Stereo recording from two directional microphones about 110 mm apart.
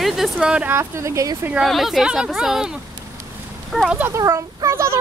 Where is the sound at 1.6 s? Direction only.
Centre (ahead or behind).